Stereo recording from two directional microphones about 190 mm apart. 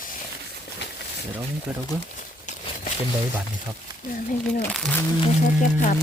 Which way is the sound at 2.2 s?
45° left (ahead or behind).